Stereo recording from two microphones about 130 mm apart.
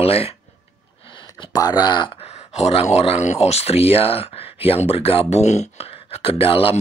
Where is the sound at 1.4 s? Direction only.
30° left (ahead or behind).